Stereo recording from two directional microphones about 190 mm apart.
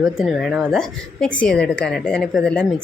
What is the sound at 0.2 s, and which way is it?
A woman's voice, centre (ahead or behind).